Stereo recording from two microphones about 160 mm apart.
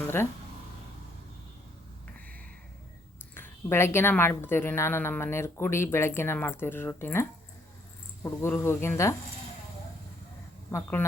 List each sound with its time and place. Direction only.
3.3 s speech: 15° left (ahead or behind)
10.7 s speech: 15° left (ahead or behind)